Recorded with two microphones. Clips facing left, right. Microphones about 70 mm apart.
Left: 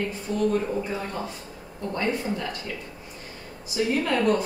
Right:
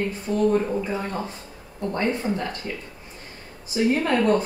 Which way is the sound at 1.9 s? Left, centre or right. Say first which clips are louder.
Right 2 dB; right.